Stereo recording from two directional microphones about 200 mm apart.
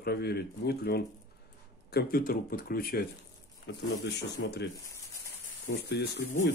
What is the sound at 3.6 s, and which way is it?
Speech, 60° left (ahead or behind).